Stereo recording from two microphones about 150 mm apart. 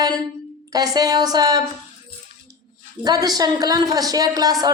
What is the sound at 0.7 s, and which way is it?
Speech, 25° right (ahead or behind).